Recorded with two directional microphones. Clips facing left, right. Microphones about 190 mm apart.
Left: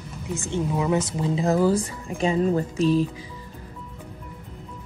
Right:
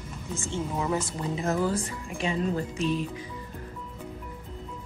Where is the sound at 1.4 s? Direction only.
35° left (ahead or behind).